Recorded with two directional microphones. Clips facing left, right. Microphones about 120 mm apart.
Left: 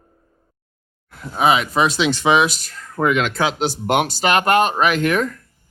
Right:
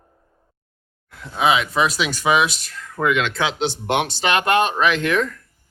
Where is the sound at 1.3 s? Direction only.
40° left (ahead or behind).